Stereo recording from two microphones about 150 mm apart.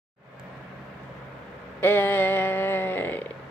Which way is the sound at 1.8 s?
15° left (ahead or behind).